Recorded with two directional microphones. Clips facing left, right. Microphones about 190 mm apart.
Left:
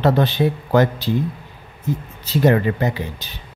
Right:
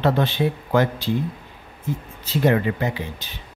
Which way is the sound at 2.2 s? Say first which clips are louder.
Left 3 dB; 40° left (ahead or behind).